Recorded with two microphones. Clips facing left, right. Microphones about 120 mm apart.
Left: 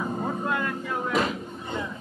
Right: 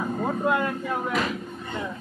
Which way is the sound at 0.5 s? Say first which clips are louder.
Right 4 dB; 20° right (ahead or behind).